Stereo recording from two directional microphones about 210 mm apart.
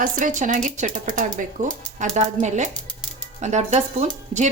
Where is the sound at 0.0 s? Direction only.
40° right (ahead or behind).